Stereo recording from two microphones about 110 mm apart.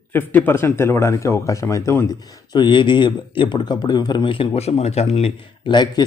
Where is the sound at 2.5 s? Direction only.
45° left (ahead or behind).